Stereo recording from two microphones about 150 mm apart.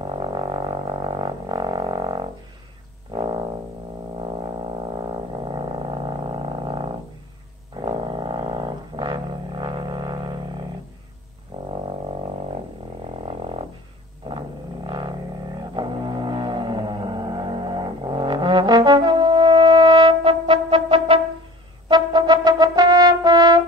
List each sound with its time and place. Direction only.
0.0 s music: 30° right (ahead or behind)
4.2 s a sound: 35° right (ahead or behind)
11.5 s music: 40° right (ahead or behind)
13.2 s music: 40° right (ahead or behind)
14.2 s a sound: 30° right (ahead or behind)
15.7 s music: 30° right (ahead or behind)
21.8 s brass instrument: 30° right (ahead or behind)